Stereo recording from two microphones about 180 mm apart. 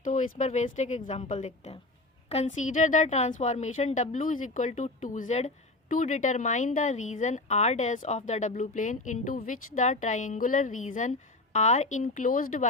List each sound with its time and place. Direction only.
0.0 s a woman's voice: 45° left (ahead or behind)